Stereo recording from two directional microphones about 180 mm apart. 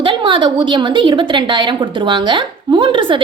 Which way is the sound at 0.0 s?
25° right (ahead or behind).